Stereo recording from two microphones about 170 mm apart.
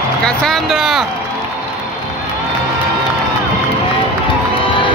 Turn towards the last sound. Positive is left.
turn(degrees=30)  # may be behind; listen again after turning